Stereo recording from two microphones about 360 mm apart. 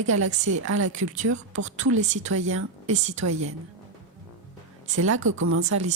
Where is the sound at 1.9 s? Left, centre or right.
Centre.